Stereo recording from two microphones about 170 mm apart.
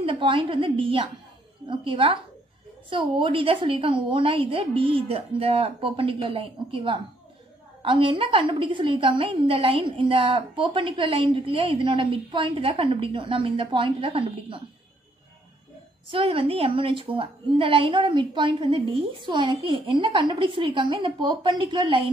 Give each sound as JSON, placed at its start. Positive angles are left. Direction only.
{"t": 0.0, "sound": "a woman's voice", "side_deg": -30}
{"t": 16.1, "sound": "a woman's voice", "side_deg": -30}